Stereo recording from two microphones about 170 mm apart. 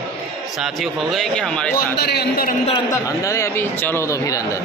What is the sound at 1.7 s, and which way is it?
Speech, 70° left (ahead or behind).